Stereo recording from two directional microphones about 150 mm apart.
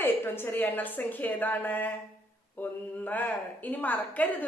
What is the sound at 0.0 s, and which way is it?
Speech, 15° left (ahead or behind).